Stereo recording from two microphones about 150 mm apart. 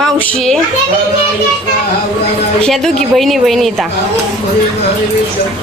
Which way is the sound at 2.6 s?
5° left (ahead or behind).